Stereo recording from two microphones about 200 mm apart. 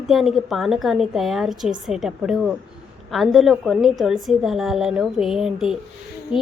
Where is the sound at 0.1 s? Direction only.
Centre (ahead or behind).